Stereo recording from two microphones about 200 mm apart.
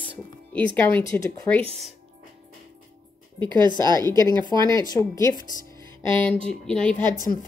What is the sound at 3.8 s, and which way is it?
Speech, 20° right (ahead or behind).